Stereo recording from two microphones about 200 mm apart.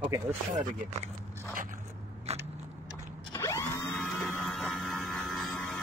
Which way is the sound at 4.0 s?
Centre (ahead or behind).